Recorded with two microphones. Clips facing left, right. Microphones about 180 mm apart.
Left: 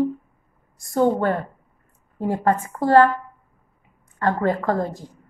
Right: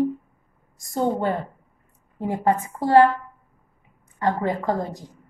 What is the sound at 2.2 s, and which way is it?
Speech, 15° right (ahead or behind).